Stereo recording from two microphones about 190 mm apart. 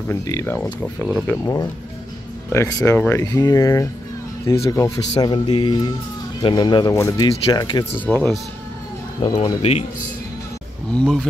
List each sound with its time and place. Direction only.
0.1 s speech: 15° left (ahead or behind)
7.2 s speech: 25° left (ahead or behind)
8.0 s speech: 5° left (ahead or behind)
9.2 s speech: 20° left (ahead or behind)
9.6 s speech: 35° left (ahead or behind)
10.9 s speech: 5° left (ahead or behind)